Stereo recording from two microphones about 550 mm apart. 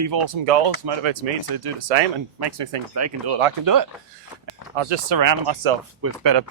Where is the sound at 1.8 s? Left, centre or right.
Right.